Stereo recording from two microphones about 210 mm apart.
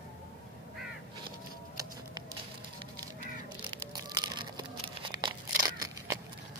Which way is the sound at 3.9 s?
20° right (ahead or behind).